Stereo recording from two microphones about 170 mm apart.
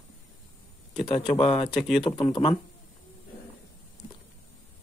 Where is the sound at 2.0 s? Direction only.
25° left (ahead or behind).